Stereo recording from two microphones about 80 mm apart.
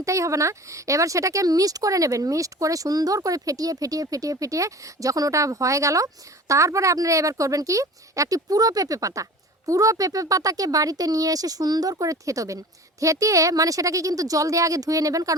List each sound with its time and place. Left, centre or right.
0.0 s speech: right